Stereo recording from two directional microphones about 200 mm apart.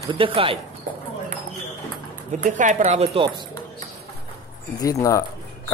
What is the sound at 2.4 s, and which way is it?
Speech, 40° right (ahead or behind).